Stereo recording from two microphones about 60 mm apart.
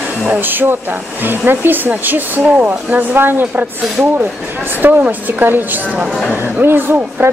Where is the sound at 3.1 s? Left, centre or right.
Right.